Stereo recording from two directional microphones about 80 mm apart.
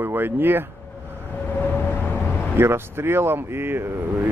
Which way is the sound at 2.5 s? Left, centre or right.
Right.